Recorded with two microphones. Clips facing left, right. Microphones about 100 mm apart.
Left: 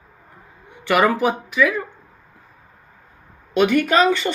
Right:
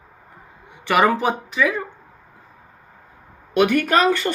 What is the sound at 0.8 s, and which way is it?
Speech, 20° right (ahead or behind).